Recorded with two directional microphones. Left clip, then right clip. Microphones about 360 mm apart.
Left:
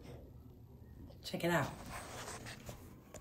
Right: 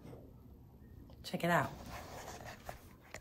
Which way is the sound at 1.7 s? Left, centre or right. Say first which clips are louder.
Left 1 dB; right.